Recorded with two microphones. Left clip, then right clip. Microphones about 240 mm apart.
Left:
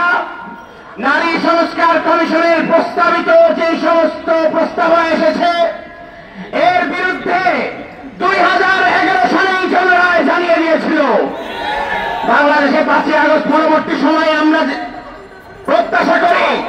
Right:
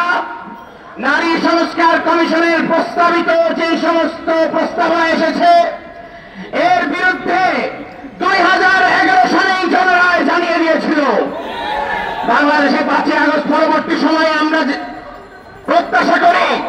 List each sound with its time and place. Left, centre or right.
1.0 s a man's voice: right
8.2 s music: right
12.3 s a man's voice: right
15.7 s a man's voice: right